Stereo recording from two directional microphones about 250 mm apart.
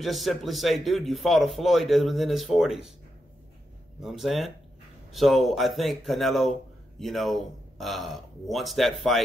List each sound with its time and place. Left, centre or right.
0.0 s speech: centre
4.0 s speech: centre